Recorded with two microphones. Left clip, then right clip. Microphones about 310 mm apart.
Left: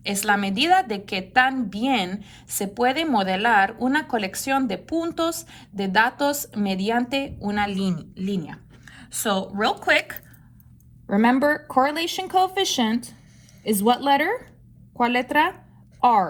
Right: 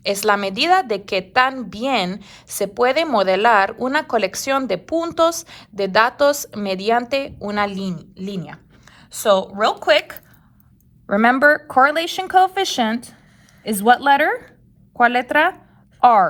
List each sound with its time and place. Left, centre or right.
0.0 s a woman's voice: centre
7.7 s a woman's voice: centre
11.1 s a woman's voice: right